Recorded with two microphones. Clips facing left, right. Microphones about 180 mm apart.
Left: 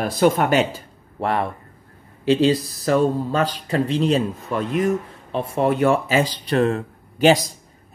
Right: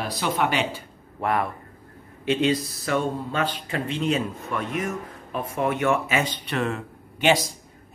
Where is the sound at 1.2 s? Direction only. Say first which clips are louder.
Left 2 dB; 30° left (ahead or behind).